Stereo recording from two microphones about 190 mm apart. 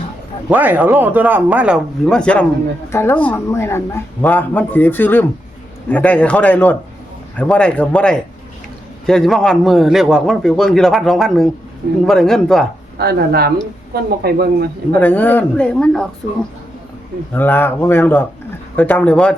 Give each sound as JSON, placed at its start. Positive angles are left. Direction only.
{"t": 0.5, "sound": "a man's voice", "side_deg": -10}
{"t": 13.0, "sound": "speech", "side_deg": -55}
{"t": 14.9, "sound": "speech", "side_deg": 10}
{"t": 17.3, "sound": "speech", "side_deg": 10}